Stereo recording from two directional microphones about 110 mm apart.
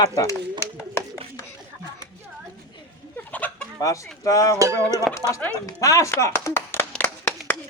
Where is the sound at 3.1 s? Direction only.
15° left (ahead or behind).